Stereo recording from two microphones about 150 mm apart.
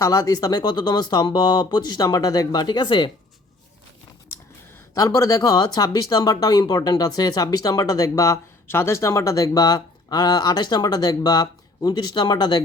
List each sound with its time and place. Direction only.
0.0 s speech: 25° left (ahead or behind)
4.9 s speech: 25° left (ahead or behind)